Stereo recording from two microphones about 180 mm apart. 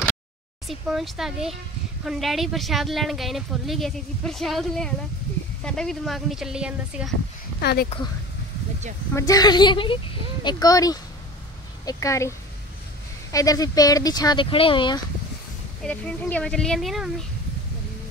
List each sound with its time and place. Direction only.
0.7 s speech: centre (ahead or behind)
7.6 s speech: 60° left (ahead or behind)
9.1 s a woman's voice: 20° left (ahead or behind)
15.8 s speech: 5° left (ahead or behind)